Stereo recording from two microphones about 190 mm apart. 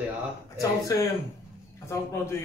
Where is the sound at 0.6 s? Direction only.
15° left (ahead or behind).